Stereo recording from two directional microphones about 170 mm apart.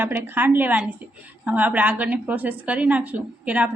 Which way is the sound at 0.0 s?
10° right (ahead or behind).